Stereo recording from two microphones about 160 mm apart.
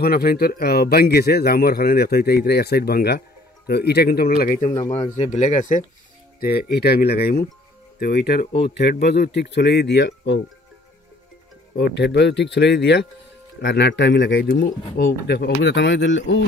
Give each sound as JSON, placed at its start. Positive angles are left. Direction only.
{"t": 0.0, "sound": "a man's voice", "side_deg": 70}
{"t": 4.4, "sound": "speech", "side_deg": 55}
{"t": 6.4, "sound": "a man's voice", "side_deg": 75}
{"t": 11.7, "sound": "speech", "side_deg": 85}